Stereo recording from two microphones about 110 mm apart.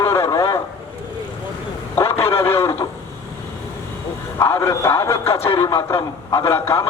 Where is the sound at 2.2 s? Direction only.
20° left (ahead or behind).